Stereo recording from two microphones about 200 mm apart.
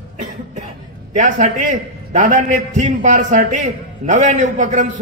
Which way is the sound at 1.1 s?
40° right (ahead or behind).